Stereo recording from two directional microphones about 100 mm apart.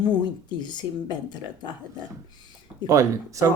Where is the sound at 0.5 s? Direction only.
45° left (ahead or behind).